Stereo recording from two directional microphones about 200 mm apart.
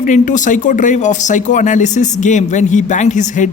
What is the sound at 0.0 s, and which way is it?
Speech, 40° left (ahead or behind).